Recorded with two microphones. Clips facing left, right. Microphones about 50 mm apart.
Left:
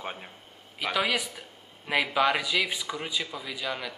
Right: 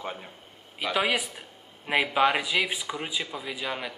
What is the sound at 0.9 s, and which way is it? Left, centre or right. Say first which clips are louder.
Speech: right 2 dB; centre.